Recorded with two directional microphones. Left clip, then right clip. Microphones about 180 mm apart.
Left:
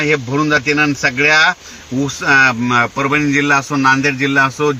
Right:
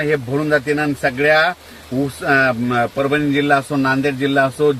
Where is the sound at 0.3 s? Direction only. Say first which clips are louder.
Left 4 dB; 15° left (ahead or behind).